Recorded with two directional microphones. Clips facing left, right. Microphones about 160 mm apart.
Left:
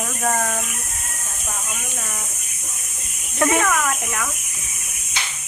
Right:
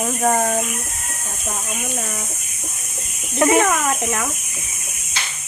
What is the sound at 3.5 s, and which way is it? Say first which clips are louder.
Speech: right 4 dB; 30° right (ahead or behind).